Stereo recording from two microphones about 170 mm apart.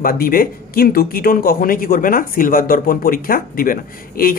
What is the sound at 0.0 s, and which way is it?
Speech, 60° left (ahead or behind).